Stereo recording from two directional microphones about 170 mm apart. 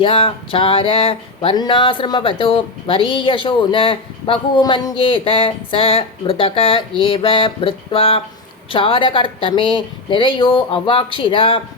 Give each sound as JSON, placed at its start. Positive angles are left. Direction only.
{"t": 0.0, "sound": "music", "side_deg": 30}